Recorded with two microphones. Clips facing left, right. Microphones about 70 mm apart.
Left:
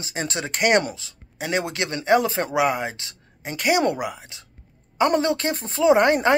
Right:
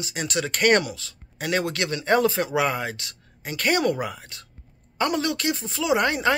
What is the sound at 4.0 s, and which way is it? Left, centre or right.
Speech, centre.